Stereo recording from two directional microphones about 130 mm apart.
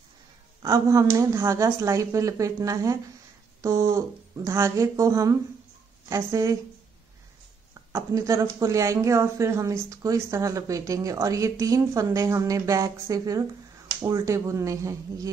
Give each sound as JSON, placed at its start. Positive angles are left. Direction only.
{"t": 0.6, "sound": "speech", "side_deg": -25}
{"t": 7.9, "sound": "speech", "side_deg": -25}